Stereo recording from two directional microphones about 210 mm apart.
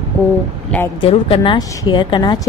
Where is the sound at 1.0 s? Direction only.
25° left (ahead or behind).